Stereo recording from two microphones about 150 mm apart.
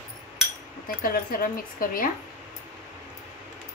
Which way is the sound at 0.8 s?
75° left (ahead or behind).